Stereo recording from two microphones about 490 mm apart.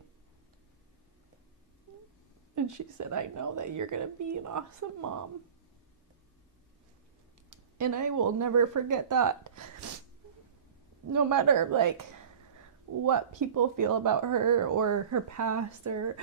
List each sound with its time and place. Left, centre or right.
2.6 s speech: right
7.5 s speech: right
11.1 s speech: right
13.1 s speech: right